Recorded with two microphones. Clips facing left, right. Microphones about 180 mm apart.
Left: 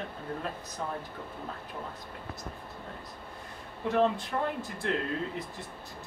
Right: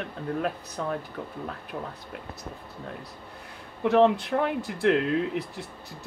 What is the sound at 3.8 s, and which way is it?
Speech, 75° right (ahead or behind).